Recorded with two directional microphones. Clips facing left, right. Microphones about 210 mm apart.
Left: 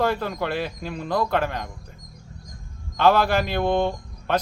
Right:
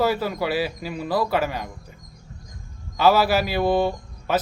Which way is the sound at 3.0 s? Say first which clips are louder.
Right 1 dB; 5° right (ahead or behind).